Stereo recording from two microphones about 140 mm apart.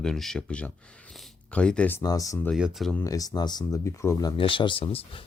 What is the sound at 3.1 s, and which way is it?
Speech, 25° left (ahead or behind).